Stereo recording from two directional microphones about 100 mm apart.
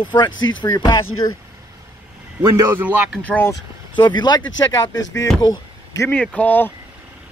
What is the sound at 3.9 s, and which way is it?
Speech, 50° left (ahead or behind).